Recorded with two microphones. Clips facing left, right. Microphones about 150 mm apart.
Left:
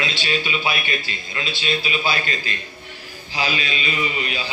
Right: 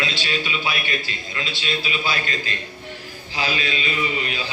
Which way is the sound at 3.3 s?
15° left (ahead or behind).